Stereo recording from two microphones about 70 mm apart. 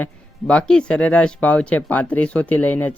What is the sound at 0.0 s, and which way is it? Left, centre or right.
Speech, centre.